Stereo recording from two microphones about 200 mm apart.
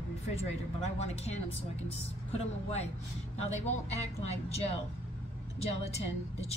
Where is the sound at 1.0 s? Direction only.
30° left (ahead or behind).